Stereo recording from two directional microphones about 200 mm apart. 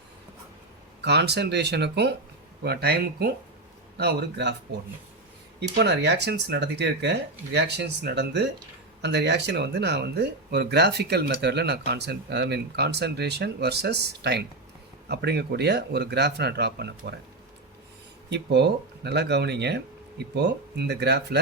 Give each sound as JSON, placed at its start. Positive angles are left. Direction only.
{"t": 1.0, "sound": "speech", "side_deg": -55}
{"t": 5.5, "sound": "speech", "side_deg": -55}
{"t": 18.3, "sound": "speech", "side_deg": -60}